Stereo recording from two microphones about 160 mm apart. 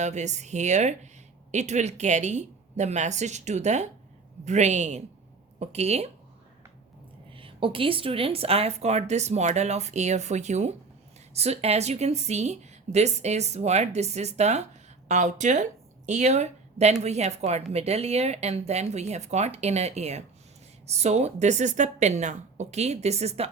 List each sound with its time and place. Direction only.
0.0 s a woman's voice: 45° right (ahead or behind)
7.3 s a woman's voice: 35° right (ahead or behind)